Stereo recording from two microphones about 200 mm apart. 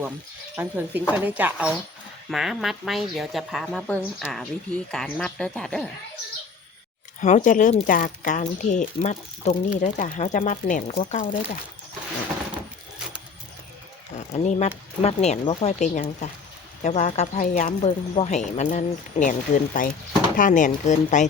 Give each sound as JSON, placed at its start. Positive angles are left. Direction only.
{"t": 0.5, "sound": "a woman's voice", "side_deg": -10}
{"t": 7.2, "sound": "speech", "side_deg": 40}
{"t": 14.2, "sound": "speech", "side_deg": 35}